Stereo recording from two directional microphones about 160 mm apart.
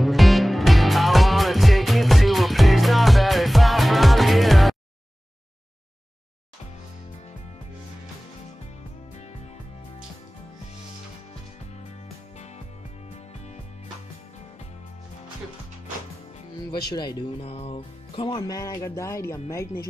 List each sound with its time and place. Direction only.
0.0 s music: centre (ahead or behind)
16.9 s speech: 30° left (ahead or behind)